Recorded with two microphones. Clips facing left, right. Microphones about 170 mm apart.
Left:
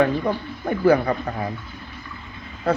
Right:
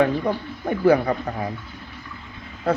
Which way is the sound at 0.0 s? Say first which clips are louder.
Even; 15° right (ahead or behind).